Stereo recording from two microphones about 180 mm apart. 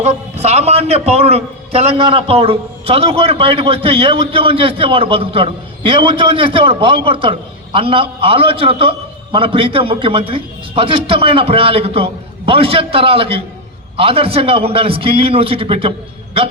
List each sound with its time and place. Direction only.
0.0 s a man's voice: 35° right (ahead or behind)